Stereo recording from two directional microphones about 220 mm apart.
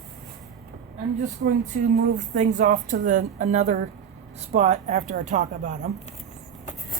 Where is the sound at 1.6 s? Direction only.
35° right (ahead or behind).